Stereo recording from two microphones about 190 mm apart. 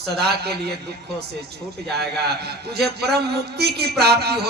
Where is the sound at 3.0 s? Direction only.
60° right (ahead or behind).